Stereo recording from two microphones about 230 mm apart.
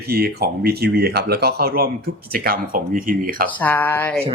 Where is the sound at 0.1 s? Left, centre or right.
Right.